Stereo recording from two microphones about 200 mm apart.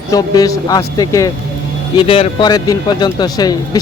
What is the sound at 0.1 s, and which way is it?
Speech, 20° left (ahead or behind).